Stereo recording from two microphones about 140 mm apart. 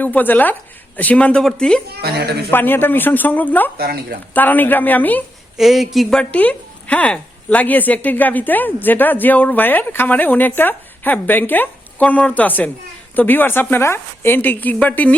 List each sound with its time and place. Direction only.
0.0 s a woman's voice: 10° left (ahead or behind)
3.8 s speech: 90° right
4.4 s a woman's voice: 15° left (ahead or behind)
5.5 s a woman's voice: centre (ahead or behind)